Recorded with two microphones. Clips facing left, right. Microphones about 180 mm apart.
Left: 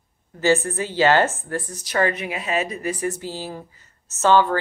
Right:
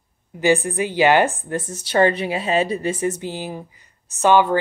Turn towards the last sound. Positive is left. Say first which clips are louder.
# right 2 dB
turn(degrees=-15)  # may be behind; listen again after turning